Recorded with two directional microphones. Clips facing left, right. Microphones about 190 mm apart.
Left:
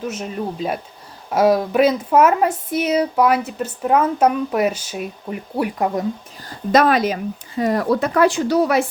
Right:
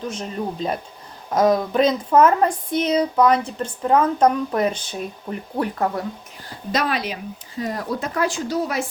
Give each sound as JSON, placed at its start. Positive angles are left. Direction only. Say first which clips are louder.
{"t": 0.1, "sound": "speech", "louder": "left 2 dB", "side_deg": 5}
{"t": 6.7, "sound": "speech", "louder": "left 8 dB", "side_deg": 50}
{"t": 7.6, "sound": "speech", "louder": "left 8 dB", "side_deg": 70}